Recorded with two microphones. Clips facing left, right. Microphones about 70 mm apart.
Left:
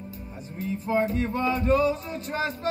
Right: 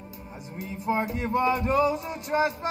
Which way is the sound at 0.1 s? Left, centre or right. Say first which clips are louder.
Left 1 dB; centre.